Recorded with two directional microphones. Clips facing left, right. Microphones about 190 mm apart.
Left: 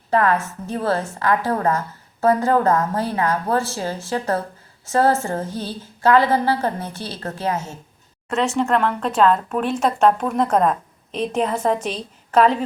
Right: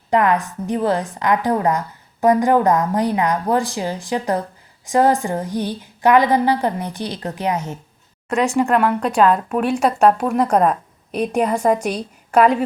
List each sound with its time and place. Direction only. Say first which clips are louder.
0.1 s speech: right 2 dB; 15° right (ahead or behind)